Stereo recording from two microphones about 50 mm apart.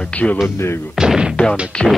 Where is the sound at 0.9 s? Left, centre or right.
Centre.